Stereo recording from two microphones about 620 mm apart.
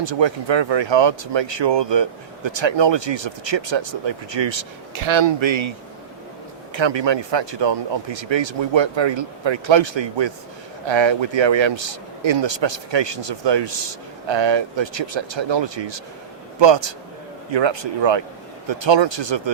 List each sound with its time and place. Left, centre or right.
0.0 s speech: right
6.7 s speech: right